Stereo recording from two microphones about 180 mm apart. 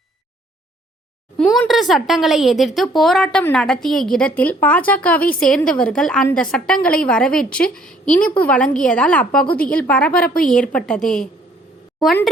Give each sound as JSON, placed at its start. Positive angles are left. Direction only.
{"t": 1.4, "sound": "a woman's voice", "side_deg": 0}
{"t": 10.2, "sound": "a woman's voice", "side_deg": 55}
{"t": 10.5, "sound": "a woman's voice", "side_deg": 5}